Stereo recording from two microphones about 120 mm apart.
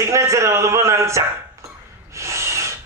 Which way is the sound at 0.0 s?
25° right (ahead or behind).